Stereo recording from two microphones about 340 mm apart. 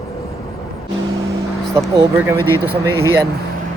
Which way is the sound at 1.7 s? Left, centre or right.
Centre.